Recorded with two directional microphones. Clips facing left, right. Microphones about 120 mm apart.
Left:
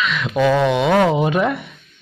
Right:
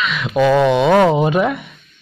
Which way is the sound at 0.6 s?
30° right (ahead or behind).